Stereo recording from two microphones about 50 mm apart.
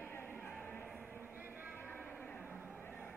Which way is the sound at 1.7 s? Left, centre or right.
Left.